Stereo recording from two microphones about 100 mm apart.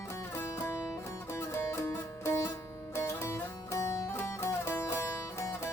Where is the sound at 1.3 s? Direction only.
25° left (ahead or behind).